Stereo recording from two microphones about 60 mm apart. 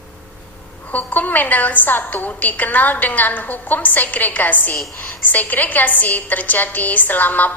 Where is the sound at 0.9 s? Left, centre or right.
Left.